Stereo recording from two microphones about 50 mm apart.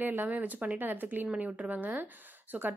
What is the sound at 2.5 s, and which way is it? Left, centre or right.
Speech, right.